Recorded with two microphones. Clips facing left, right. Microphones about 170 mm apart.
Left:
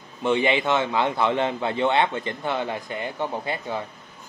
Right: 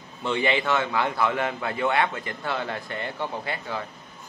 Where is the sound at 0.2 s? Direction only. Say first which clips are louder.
Left 3 dB; 20° left (ahead or behind).